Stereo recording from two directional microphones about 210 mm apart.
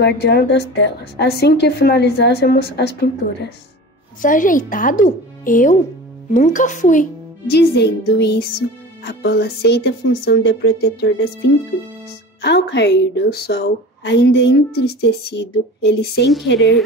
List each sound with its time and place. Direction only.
0.0 s a woman's voice: 50° left (ahead or behind)
4.2 s a woman's voice: 40° left (ahead or behind)